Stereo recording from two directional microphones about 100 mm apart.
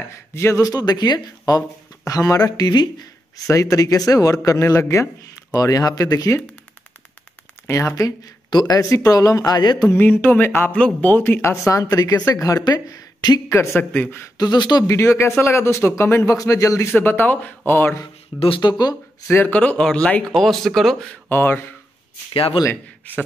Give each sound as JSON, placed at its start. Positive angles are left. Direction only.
{"t": 0.3, "sound": "speech", "side_deg": 25}
{"t": 7.6, "sound": "a man's voice", "side_deg": 30}
{"t": 8.5, "sound": "speech", "side_deg": 45}
{"t": 9.8, "sound": "a man's voice", "side_deg": 20}
{"t": 13.5, "sound": "a man's voice", "side_deg": 25}
{"t": 13.9, "sound": "speech", "side_deg": 15}
{"t": 14.3, "sound": "speech", "side_deg": 45}
{"t": 14.9, "sound": "a man's voice", "side_deg": 25}
{"t": 18.6, "sound": "speech", "side_deg": 45}
{"t": 19.3, "sound": "speech", "side_deg": 15}
{"t": 21.3, "sound": "a man's voice", "side_deg": 20}
{"t": 22.3, "sound": "a man's voice", "side_deg": 65}